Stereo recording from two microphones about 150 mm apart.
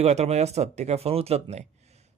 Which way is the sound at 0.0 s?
45° right (ahead or behind).